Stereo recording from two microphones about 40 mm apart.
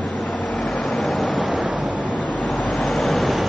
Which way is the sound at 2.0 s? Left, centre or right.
Left.